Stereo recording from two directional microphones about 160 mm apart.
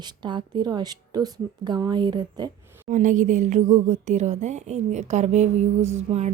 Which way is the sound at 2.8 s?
50° right (ahead or behind).